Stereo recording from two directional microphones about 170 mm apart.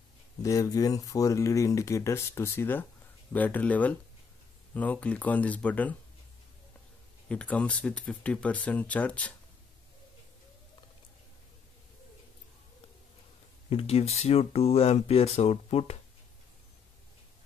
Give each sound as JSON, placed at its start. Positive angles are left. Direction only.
{"t": 0.4, "sound": "speech", "side_deg": 20}
{"t": 7.2, "sound": "speech", "side_deg": 5}
{"t": 13.7, "sound": "speech", "side_deg": 35}